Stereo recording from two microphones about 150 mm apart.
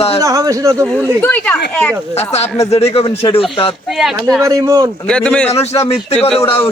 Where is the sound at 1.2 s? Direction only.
10° left (ahead or behind).